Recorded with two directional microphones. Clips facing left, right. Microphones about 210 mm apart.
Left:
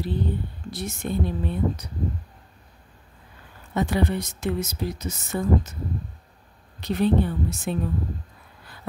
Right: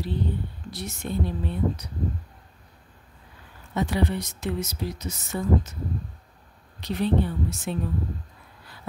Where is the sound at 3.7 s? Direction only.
50° left (ahead or behind).